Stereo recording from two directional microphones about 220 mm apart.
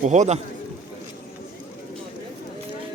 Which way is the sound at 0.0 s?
30° right (ahead or behind).